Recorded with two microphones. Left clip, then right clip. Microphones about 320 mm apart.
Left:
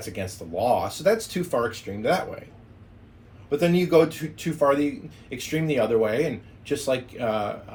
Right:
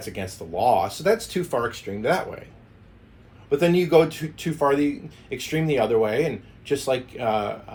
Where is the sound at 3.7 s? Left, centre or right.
Centre.